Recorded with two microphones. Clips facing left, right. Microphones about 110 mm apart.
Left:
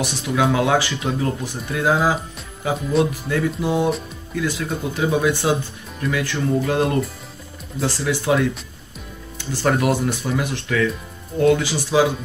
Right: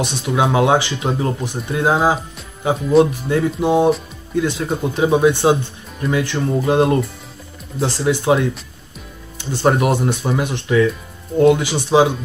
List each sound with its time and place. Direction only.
0.0 s speech: 20° right (ahead or behind)